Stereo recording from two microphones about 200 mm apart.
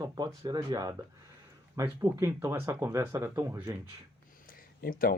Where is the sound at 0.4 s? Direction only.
20° right (ahead or behind).